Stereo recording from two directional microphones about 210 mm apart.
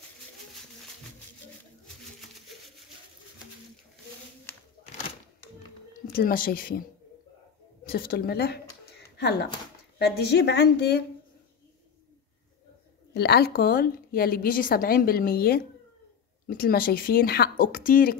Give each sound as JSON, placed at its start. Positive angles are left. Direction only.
{"t": 6.1, "sound": "a woman's voice", "side_deg": 45}
{"t": 7.8, "sound": "speech", "side_deg": 45}
{"t": 9.0, "sound": "a sound", "side_deg": 50}
{"t": 9.9, "sound": "a woman's voice", "side_deg": 50}
{"t": 13.1, "sound": "a woman's voice", "side_deg": 50}